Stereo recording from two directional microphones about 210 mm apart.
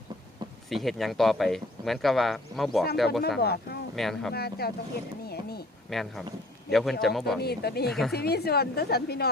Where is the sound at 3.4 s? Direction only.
50° left (ahead or behind).